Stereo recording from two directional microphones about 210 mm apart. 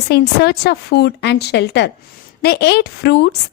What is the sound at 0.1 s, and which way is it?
A woman's voice, 50° left (ahead or behind).